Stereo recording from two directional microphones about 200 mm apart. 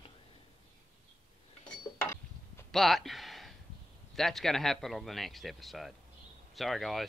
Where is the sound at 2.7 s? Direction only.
Centre (ahead or behind).